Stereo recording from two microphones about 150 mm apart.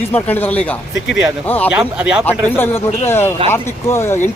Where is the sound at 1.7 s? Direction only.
5° right (ahead or behind).